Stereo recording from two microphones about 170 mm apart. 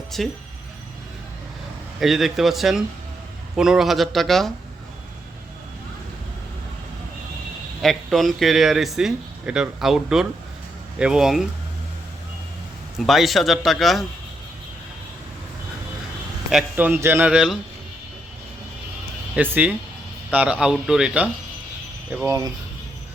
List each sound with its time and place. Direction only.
0.1 s speech: centre (ahead or behind)
2.0 s speech: centre (ahead or behind)
7.8 s speech: centre (ahead or behind)
13.0 s speech: centre (ahead or behind)
16.5 s a man's voice: 5° right (ahead or behind)
19.4 s a man's voice: 10° right (ahead or behind)
22.1 s a man's voice: 15° right (ahead or behind)